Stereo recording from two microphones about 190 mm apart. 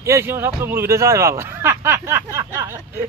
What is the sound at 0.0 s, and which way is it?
Speech, 15° right (ahead or behind).